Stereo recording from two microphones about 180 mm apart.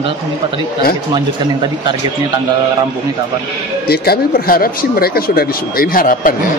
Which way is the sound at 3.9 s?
55° left (ahead or behind).